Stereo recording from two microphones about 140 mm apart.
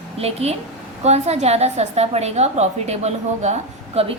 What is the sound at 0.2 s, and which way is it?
A woman's voice, 45° right (ahead or behind).